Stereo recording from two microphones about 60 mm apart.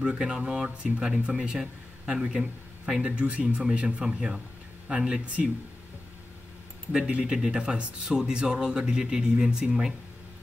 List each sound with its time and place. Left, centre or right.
0.0 s speech: centre
6.9 s speech: centre